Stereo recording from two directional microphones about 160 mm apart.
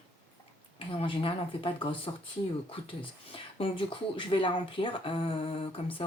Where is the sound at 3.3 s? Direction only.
35° left (ahead or behind).